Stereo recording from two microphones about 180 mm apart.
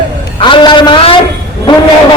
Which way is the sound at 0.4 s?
25° left (ahead or behind).